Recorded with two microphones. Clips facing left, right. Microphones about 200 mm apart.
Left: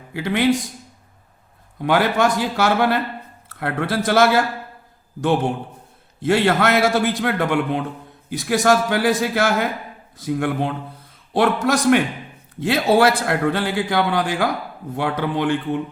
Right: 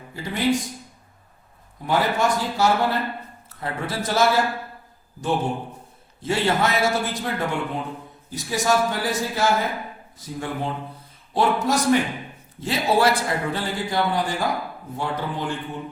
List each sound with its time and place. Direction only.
0.1 s speech: 75° left (ahead or behind)
1.8 s a man's voice: 80° left
6.2 s a man's voice: 65° left (ahead or behind)